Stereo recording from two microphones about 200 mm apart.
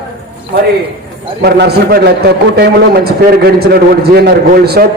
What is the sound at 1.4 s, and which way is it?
A man's voice, 55° right (ahead or behind).